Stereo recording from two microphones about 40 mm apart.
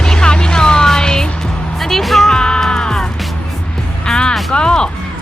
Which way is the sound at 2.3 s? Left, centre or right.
Centre.